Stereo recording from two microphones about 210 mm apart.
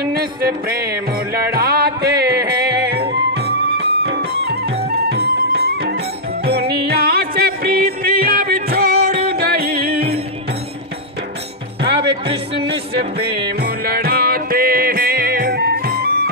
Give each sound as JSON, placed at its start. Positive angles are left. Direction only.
{"t": 0.0, "sound": "music", "side_deg": -45}
{"t": 12.9, "sound": "music", "side_deg": -25}
{"t": 13.6, "sound": "music", "side_deg": -45}